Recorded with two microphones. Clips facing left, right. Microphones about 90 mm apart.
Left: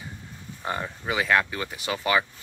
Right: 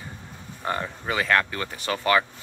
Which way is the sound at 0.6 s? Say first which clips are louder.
Right 1 dB; 15° left (ahead or behind).